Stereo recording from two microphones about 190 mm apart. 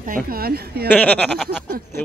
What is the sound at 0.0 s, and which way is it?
Speech, 50° right (ahead or behind).